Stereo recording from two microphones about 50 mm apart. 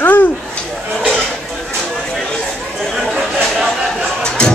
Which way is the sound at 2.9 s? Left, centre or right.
Centre.